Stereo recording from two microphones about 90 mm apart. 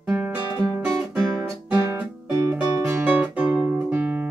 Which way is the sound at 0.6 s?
35° right (ahead or behind).